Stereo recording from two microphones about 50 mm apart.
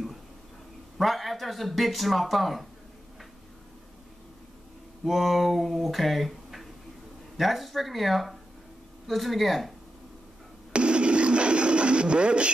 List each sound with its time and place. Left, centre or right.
0.9 s speech: centre
5.0 s speech: centre
10.7 s radio: right